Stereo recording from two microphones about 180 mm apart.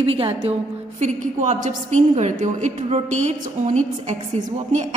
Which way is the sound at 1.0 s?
45° right (ahead or behind).